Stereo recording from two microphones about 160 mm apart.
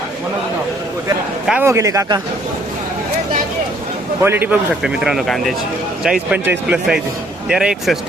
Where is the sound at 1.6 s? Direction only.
20° right (ahead or behind).